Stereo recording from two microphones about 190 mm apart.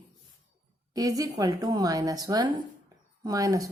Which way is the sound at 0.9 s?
20° right (ahead or behind).